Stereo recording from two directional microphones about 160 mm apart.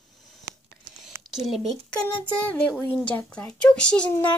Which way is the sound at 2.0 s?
10° left (ahead or behind).